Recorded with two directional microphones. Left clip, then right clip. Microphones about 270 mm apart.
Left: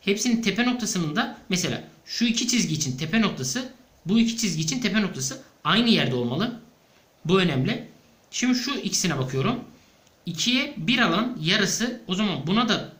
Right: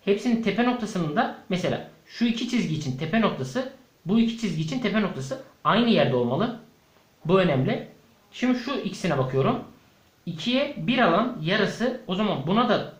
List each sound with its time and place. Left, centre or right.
0.0 s speech: centre